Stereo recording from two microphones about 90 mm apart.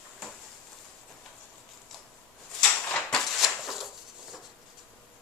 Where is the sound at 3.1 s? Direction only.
5° left (ahead or behind).